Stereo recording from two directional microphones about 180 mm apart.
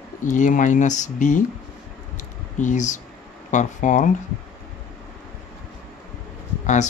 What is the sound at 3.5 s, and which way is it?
Speech, 45° left (ahead or behind).